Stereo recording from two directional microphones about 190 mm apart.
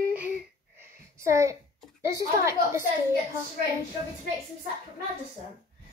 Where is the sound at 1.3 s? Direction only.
15° right (ahead or behind).